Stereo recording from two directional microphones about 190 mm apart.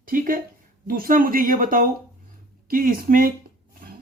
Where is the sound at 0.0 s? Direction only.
45° right (ahead or behind).